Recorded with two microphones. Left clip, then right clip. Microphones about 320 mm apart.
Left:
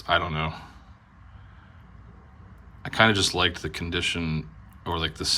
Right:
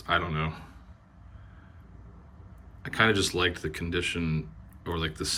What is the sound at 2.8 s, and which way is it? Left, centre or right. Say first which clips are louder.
Speech: left 4 dB; centre.